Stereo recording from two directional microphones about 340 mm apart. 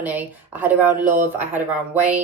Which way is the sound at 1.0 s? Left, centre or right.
Right.